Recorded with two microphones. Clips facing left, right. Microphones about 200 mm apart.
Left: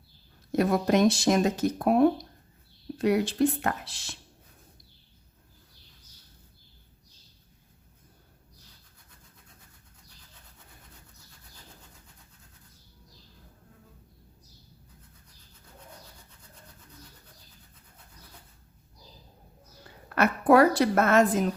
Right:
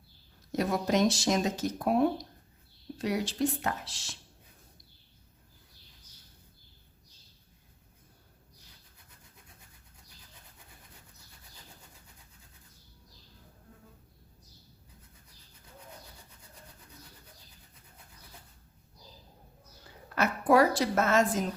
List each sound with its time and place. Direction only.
0.5 s speech: 55° left (ahead or behind)
20.1 s a woman's voice: 60° left (ahead or behind)